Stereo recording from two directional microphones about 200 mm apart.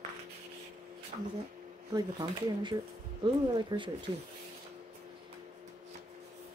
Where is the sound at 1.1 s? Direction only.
35° right (ahead or behind).